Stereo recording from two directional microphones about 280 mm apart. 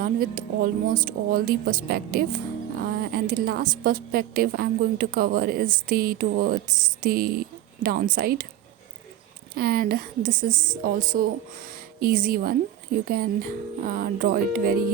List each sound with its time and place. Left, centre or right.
0.0 s a woman's voice: right
9.6 s a woman's voice: right